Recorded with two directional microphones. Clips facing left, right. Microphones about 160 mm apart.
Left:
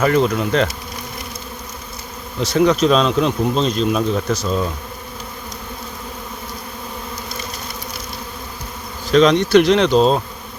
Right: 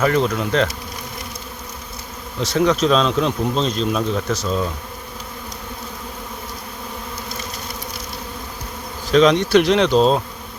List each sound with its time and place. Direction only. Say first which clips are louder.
0.0 s speech: left 2 dB; centre (ahead or behind)
2.4 s speech: left 2 dB; centre (ahead or behind)
9.1 s speech: left 2 dB; 5° right (ahead or behind)